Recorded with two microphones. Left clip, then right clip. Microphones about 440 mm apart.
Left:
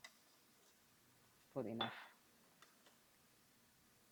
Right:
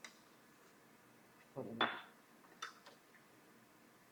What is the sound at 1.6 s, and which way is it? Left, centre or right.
Speech, left.